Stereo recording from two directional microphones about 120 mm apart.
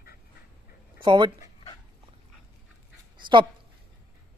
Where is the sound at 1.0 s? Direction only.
40° right (ahead or behind).